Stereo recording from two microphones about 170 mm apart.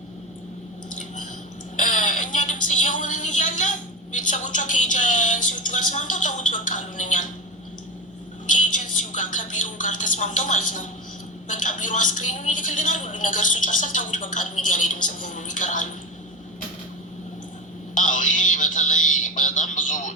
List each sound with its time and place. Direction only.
1.7 s speech: 50° left (ahead or behind)
8.4 s a sound: 50° left (ahead or behind)
11.5 s a woman's voice: 50° left (ahead or behind)
17.9 s music: 50° left (ahead or behind)